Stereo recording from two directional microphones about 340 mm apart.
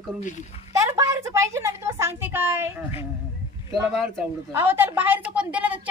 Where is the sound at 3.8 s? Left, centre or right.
Centre.